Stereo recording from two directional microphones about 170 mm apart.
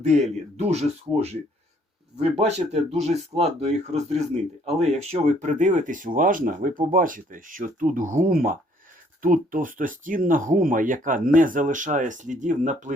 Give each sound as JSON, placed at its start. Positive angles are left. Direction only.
{"t": 0.0, "sound": "speech", "side_deg": -40}